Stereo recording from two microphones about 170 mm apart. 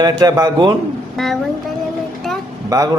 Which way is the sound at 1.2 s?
Centre (ahead or behind).